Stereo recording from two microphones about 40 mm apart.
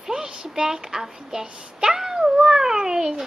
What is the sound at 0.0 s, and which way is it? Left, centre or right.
A woman's voice, centre.